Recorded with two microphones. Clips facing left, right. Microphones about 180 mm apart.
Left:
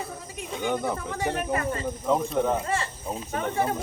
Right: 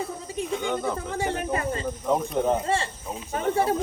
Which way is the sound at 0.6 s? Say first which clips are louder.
Left 4 dB; 10° left (ahead or behind).